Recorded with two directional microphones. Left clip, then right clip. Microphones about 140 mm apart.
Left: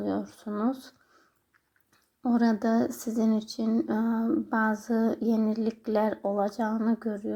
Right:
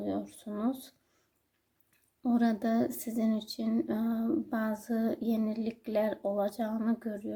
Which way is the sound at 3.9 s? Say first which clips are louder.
Left 4 dB; 40° right (ahead or behind).